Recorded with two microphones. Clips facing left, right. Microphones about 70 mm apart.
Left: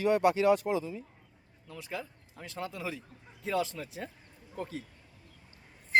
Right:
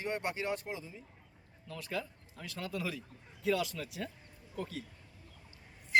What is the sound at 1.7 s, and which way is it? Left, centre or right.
Speech, centre.